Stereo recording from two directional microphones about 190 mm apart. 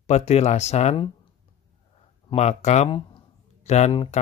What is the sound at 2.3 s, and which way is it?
Speech, 35° left (ahead or behind).